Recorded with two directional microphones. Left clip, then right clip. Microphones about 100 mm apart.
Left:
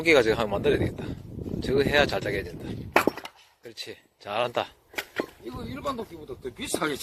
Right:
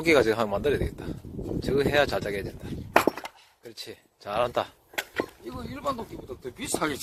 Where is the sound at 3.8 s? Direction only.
70° right (ahead or behind).